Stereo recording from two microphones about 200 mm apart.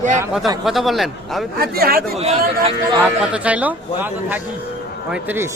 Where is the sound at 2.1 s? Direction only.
30° right (ahead or behind).